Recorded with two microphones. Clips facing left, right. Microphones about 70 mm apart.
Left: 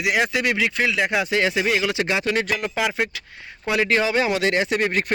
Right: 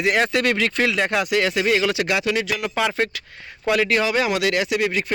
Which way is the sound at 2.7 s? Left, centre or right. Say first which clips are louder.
Right 1 dB; centre.